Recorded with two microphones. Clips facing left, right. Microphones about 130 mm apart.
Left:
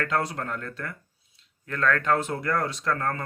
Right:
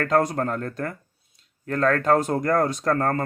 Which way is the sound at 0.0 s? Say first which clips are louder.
Right 6 dB; 45° right (ahead or behind).